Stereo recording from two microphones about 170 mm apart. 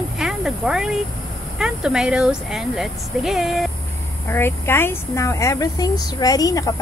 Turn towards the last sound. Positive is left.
turn(degrees=20)  # may be behind; listen again after turning